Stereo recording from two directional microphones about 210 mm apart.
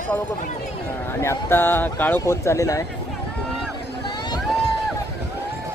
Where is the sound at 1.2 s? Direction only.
10° left (ahead or behind).